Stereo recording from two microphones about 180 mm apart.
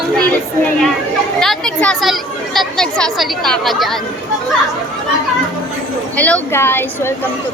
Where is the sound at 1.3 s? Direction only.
5° left (ahead or behind).